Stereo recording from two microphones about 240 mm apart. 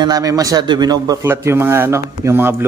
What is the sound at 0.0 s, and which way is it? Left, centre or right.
A man's voice, centre.